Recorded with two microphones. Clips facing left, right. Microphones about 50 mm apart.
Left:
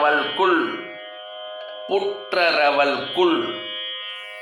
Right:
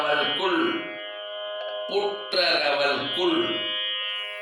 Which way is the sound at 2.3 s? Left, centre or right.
Left.